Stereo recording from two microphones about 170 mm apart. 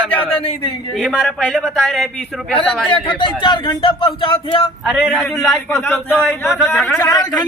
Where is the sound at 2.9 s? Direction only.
30° left (ahead or behind).